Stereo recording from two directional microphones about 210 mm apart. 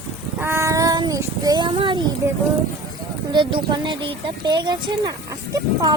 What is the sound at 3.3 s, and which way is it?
Speech, 25° right (ahead or behind).